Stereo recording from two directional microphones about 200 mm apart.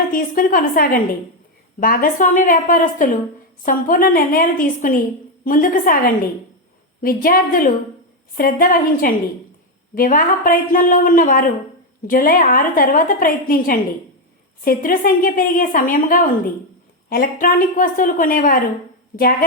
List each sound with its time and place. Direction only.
0.1 s a woman's voice: 45° left (ahead or behind)
17.4 s a woman's voice: 45° left (ahead or behind)